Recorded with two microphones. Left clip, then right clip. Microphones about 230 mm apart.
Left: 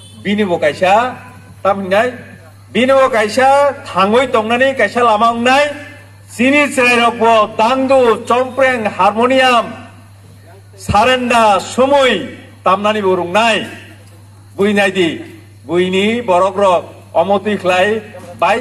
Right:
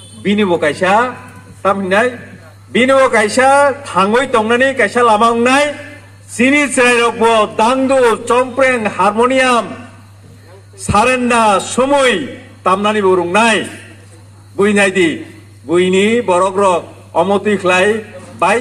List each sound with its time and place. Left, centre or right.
0.2 s a man's voice: right
10.9 s a man's voice: right